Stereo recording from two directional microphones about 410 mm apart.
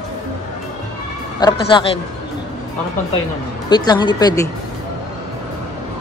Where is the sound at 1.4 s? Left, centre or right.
Centre.